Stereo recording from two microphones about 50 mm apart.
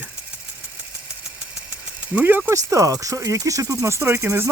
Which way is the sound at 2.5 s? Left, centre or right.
Right.